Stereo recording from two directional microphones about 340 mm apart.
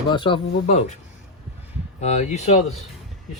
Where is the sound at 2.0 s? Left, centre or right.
Centre.